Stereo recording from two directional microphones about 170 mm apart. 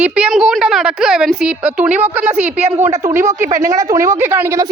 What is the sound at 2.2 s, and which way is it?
Speech, 40° right (ahead or behind).